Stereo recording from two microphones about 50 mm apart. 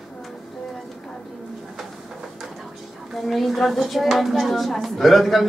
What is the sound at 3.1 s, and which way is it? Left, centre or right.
A woman's voice, centre.